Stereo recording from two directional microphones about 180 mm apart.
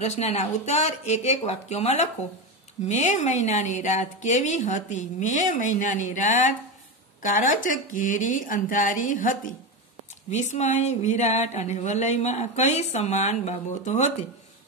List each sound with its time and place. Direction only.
0.0 s a woman's voice: 35° left (ahead or behind)